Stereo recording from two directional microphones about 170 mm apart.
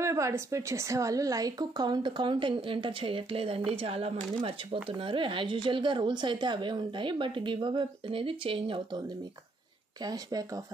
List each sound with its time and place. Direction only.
0.0 s a woman's voice: 15° right (ahead or behind)
10.0 s a woman's voice: 20° right (ahead or behind)